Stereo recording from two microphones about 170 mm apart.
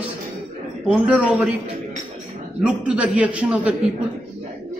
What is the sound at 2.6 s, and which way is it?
A man's voice, 5° right (ahead or behind).